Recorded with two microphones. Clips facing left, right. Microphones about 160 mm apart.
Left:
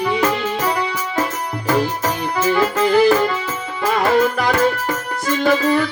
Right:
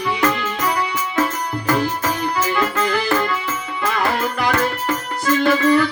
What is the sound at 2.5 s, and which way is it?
Music, 30° left (ahead or behind).